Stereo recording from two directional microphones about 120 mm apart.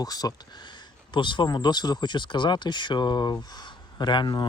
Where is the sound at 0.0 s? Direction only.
30° left (ahead or behind).